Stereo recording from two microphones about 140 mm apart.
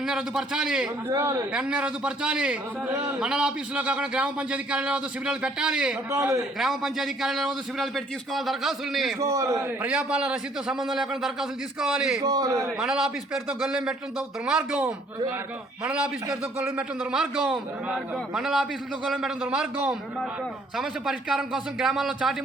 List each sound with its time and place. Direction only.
0.0 s a man's voice: 5° right (ahead or behind)
1.1 s a man's voice: 20° right (ahead or behind)
1.5 s a man's voice: 5° right (ahead or behind)
6.1 s a man's voice: 20° right (ahead or behind)
6.6 s a man's voice: centre (ahead or behind)
9.2 s a man's voice: 20° right (ahead or behind)
9.8 s a man's voice: 5° right (ahead or behind)
12.2 s a man's voice: 25° right (ahead or behind)
12.8 s a man's voice: 5° right (ahead or behind)